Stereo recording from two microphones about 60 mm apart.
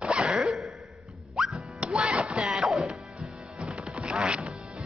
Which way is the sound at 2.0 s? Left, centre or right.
Centre.